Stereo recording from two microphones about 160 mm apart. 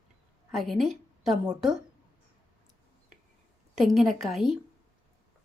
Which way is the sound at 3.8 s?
Centre (ahead or behind).